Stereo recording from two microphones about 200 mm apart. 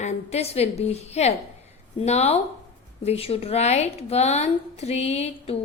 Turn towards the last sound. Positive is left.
turn(degrees=30)  # may be behind; listen again after turning